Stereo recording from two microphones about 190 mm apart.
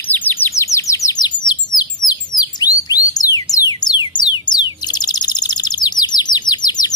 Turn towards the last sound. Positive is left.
turn(degrees=20)  # may be behind; listen again after turning